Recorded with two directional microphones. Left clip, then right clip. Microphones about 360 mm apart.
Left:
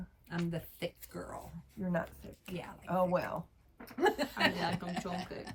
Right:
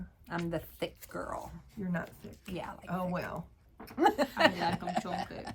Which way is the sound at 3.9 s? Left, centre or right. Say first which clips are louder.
Right 4 dB; centre.